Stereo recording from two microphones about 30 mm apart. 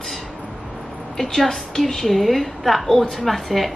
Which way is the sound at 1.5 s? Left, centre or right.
Centre.